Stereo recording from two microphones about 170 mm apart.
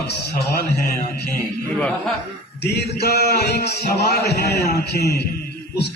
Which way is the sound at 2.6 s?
75° left (ahead or behind).